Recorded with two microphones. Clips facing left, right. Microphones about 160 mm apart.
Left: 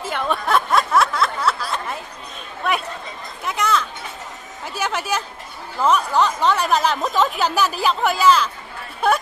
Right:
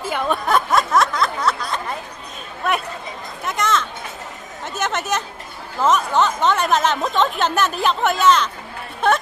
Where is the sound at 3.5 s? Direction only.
10° left (ahead or behind).